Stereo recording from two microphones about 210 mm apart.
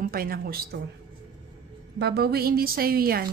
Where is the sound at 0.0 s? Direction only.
45° right (ahead or behind).